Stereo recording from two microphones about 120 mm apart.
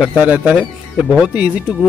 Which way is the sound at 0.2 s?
10° right (ahead or behind).